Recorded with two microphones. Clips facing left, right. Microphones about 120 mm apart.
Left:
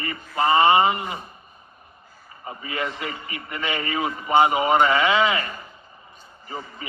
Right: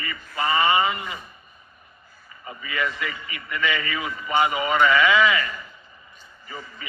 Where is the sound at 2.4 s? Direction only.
40° left (ahead or behind).